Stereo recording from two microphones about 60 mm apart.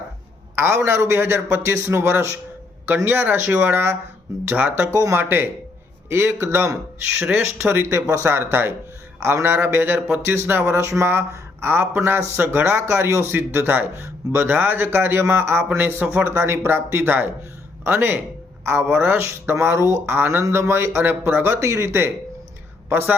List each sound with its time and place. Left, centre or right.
0.5 s a man's voice: right
4.4 s speech: right
4.9 s speech: right
5.2 s a man's voice: right
6.1 s speech: right
8.0 s speech: right
8.3 s a man's voice: right
11.6 s a man's voice: right
22.9 s speech: right